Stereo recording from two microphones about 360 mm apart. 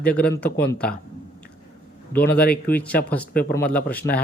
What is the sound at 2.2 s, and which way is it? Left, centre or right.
Speech, left.